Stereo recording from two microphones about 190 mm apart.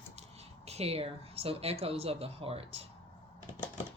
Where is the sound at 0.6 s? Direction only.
35° right (ahead or behind).